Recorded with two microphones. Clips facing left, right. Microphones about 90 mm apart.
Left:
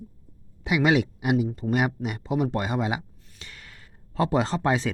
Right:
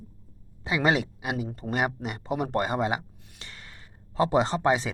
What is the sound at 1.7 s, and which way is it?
Speech, 30° right (ahead or behind).